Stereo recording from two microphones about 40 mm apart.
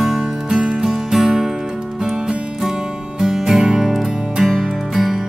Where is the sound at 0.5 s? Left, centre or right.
Right.